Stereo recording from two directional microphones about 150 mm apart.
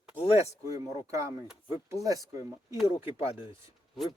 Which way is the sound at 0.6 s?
20° right (ahead or behind).